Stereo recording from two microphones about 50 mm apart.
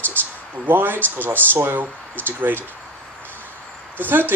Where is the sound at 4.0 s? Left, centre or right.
Right.